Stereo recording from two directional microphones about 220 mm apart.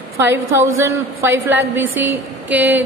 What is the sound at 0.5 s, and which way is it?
A woman's voice, 15° right (ahead or behind).